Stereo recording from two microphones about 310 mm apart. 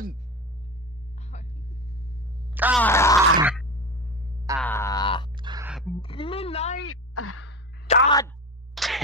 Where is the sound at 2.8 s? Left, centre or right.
Centre.